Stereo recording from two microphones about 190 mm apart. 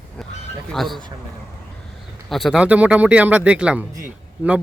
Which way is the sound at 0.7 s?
Centre (ahead or behind).